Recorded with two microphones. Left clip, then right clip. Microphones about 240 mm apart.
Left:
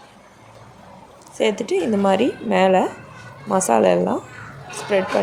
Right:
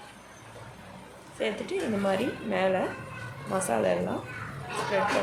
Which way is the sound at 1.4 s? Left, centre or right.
Left.